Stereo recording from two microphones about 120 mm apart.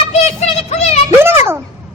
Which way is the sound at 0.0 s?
65° left (ahead or behind).